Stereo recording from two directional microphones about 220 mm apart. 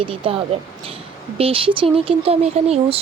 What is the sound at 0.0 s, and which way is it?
Speech, 25° right (ahead or behind).